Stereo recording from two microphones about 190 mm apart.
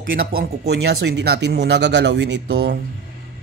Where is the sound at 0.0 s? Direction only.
55° right (ahead or behind).